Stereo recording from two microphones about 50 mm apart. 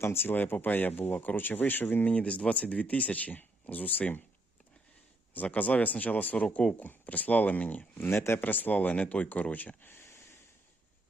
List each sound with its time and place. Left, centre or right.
0.0 s speech: left
0.3 s speech: left
2.0 s speech: left
5.3 s speech: left
8.0 s speech: left